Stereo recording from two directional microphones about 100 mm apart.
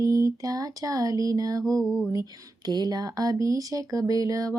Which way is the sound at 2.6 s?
45° right (ahead or behind).